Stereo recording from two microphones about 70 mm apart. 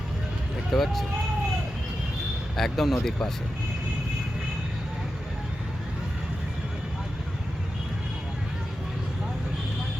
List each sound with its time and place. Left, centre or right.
0.7 s speech: centre
2.6 s speech: centre